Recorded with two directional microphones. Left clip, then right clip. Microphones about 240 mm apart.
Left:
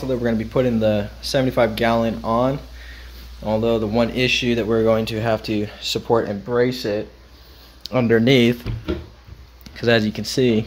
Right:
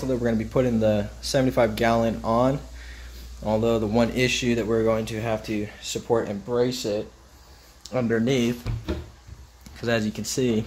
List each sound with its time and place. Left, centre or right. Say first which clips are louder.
0.0 s speech: left 3 dB; centre
7.8 s speech: left 7 dB; left
9.8 s speech: left 7 dB; centre